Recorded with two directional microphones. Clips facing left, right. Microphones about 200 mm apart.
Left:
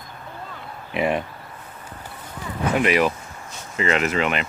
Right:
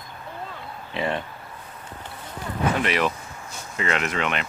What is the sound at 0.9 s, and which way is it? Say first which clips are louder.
Speech: left 5 dB; 15° left (ahead or behind).